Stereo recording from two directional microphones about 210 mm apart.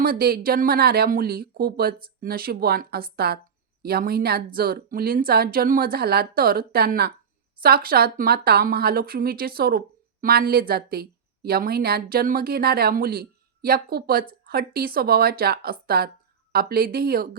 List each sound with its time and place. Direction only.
0.0 s speech: 45° right (ahead or behind)